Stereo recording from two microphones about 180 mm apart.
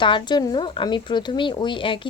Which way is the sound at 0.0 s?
25° left (ahead or behind).